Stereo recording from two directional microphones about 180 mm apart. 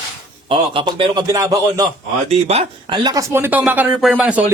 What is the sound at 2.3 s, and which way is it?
Speech, 35° right (ahead or behind).